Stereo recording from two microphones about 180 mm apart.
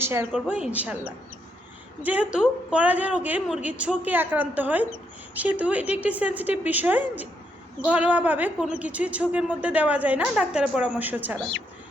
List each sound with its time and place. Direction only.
0.0 s a woman's voice: 15° right (ahead or behind)
2.0 s a woman's voice: 5° right (ahead or behind)